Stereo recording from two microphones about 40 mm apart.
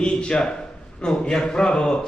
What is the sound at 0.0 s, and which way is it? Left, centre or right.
A man's voice, left.